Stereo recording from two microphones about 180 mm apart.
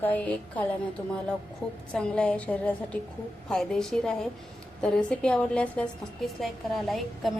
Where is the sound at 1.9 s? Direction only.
5° left (ahead or behind).